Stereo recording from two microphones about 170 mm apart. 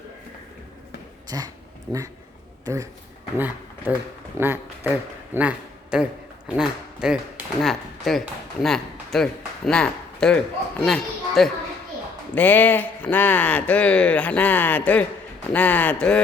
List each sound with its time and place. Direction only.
1.9 s a man's voice: 25° right (ahead or behind); by 16.2 s 5° left (ahead or behind)